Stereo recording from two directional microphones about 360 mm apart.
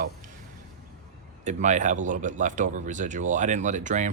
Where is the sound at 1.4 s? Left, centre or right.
Centre.